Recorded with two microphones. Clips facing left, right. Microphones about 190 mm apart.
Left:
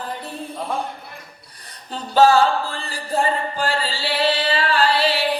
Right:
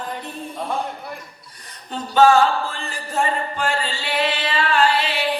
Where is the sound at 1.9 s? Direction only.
35° left (ahead or behind).